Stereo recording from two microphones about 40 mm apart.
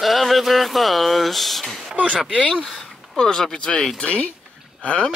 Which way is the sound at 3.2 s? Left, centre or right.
Centre.